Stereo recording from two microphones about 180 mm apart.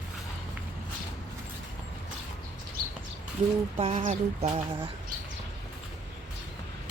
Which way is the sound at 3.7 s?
30° right (ahead or behind).